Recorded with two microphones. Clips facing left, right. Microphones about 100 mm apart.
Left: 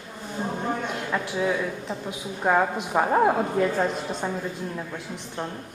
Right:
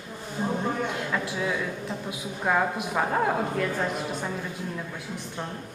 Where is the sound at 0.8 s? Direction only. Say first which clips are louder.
Left 1 dB; 15° left (ahead or behind).